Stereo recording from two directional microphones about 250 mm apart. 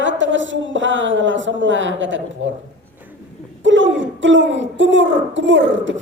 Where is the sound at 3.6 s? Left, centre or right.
Right.